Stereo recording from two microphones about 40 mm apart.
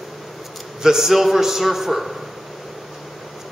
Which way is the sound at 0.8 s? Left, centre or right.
Centre.